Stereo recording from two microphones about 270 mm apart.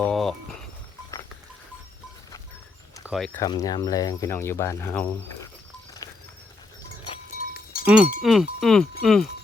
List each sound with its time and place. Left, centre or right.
0.0 s a sound: centre
3.1 s cowbell: centre
3.4 s speech: centre
6.0 s horse: centre
7.9 s cowbell: centre